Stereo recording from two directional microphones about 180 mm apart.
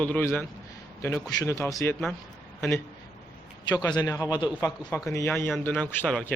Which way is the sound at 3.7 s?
25° left (ahead or behind).